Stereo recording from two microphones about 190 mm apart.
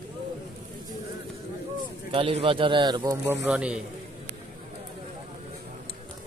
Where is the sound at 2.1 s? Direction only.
25° right (ahead or behind).